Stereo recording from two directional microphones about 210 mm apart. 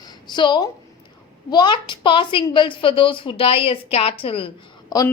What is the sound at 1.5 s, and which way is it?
A woman's voice, 20° left (ahead or behind).